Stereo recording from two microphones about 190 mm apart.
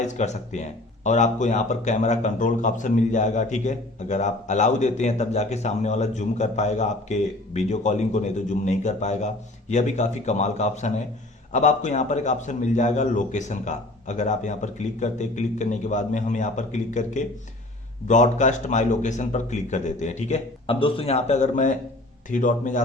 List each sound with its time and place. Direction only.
0.0 s speech: 35° left (ahead or behind)